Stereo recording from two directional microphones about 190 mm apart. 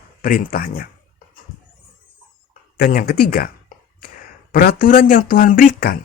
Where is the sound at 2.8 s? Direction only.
50° left (ahead or behind).